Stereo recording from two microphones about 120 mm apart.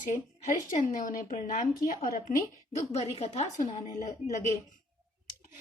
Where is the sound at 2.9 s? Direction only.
65° left (ahead or behind).